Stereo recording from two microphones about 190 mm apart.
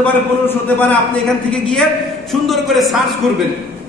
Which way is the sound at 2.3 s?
Centre (ahead or behind).